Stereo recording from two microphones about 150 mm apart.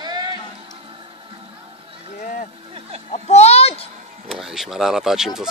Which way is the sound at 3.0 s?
45° left (ahead or behind).